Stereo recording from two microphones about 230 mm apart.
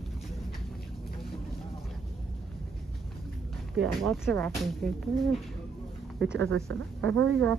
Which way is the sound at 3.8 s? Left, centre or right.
Centre.